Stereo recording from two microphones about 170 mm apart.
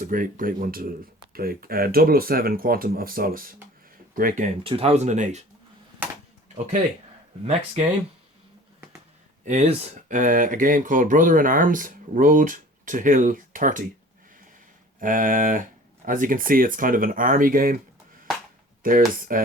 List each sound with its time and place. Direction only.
0.0 s speech: 55° right (ahead or behind)
4.6 s speech: 35° right (ahead or behind)
7.4 s speech: 40° right (ahead or behind)
9.4 s speech: 40° right (ahead or behind)
14.9 s speech: 50° right (ahead or behind)
18.8 s speech: 55° right (ahead or behind)